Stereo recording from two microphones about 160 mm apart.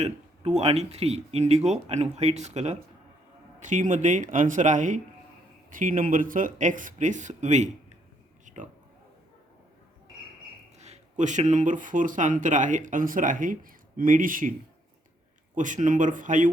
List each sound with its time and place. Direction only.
0.0 s speech: 40° right (ahead or behind)
8.5 s oink: 50° right (ahead or behind)
10.8 s speech: 45° right (ahead or behind)
15.5 s speech: 55° right (ahead or behind)